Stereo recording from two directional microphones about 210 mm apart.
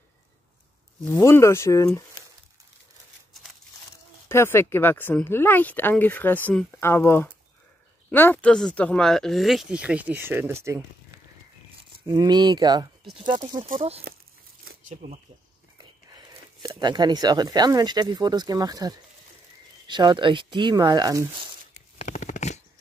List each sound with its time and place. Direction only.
1.1 s speech: 15° left (ahead or behind)
4.3 s speech: 10° left (ahead or behind); by 10.8 s 10° right (ahead or behind)
12.1 s speech: 20° right (ahead or behind); by 15.1 s 35° right (ahead or behind)
16.1 s speech: 20° right (ahead or behind)
21.7 s shuffling cards: 35° left (ahead or behind)